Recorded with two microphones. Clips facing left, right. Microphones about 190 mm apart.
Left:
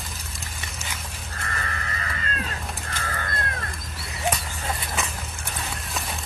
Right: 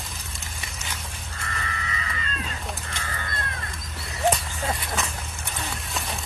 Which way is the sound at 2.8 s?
60° left (ahead or behind).